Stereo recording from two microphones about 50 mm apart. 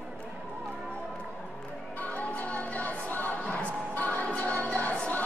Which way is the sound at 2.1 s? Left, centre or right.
Left.